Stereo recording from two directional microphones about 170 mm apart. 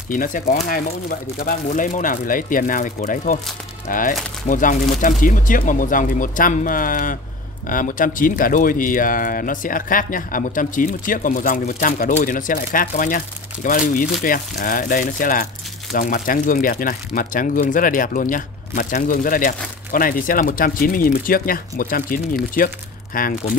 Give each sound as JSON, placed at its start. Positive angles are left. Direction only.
{"t": 0.1, "sound": "speech", "side_deg": 50}